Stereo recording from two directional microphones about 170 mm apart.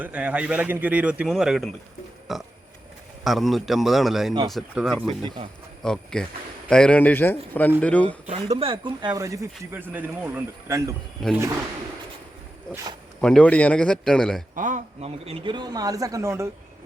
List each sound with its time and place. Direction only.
0.0 s a man's voice: 5° right (ahead or behind)
8.3 s speech: 35° right (ahead or behind); by 10.9 s 15° right (ahead or behind)
11.2 s speech: 5° left (ahead or behind)
13.2 s speech: 5° left (ahead or behind)
14.5 s speech: 50° right (ahead or behind); by 16.5 s 15° right (ahead or behind)